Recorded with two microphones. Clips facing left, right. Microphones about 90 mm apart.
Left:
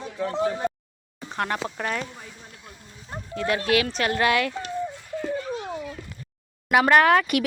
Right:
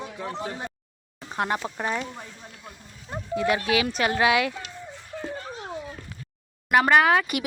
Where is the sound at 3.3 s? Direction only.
15° right (ahead or behind).